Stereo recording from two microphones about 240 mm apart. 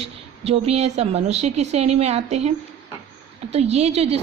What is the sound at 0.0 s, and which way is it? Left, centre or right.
A woman's voice, right.